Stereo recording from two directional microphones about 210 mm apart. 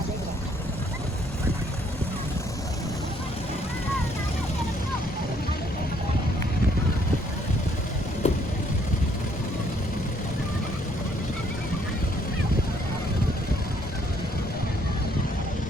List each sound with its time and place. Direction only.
8.2 s vehicle: 30° left (ahead or behind)